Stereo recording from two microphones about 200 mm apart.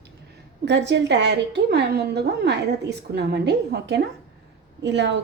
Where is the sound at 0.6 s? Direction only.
60° right (ahead or behind).